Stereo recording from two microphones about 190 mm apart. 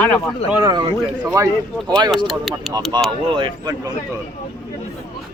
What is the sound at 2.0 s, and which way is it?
Speech, centre (ahead or behind).